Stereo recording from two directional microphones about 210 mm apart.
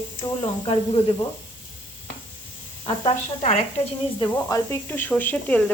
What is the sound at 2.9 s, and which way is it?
Speech, 30° left (ahead or behind).